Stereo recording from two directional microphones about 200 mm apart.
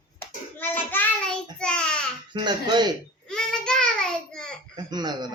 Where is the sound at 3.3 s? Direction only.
5° left (ahead or behind).